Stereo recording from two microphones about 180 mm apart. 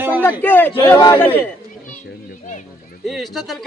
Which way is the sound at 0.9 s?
20° left (ahead or behind).